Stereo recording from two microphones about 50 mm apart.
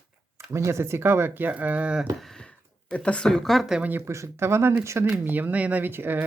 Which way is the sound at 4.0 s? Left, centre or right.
Right.